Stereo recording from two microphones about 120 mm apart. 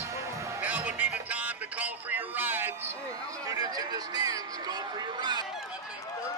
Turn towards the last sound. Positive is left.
turn(degrees=-35)  # may be behind; listen again after turning